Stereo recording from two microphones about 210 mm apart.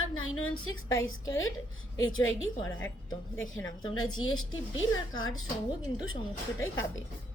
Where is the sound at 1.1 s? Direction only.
70° left (ahead or behind).